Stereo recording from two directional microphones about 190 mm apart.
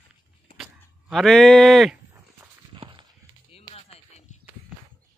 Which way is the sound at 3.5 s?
30° left (ahead or behind).